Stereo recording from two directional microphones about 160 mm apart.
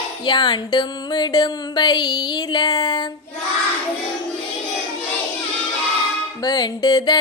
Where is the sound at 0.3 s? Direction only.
30° left (ahead or behind).